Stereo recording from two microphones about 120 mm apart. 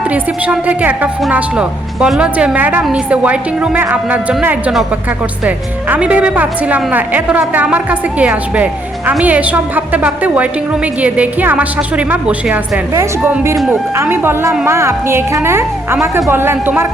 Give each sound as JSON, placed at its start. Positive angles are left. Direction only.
{"t": 0.1, "sound": "a woman's voice", "side_deg": -10}
{"t": 12.9, "sound": "a woman's voice", "side_deg": -20}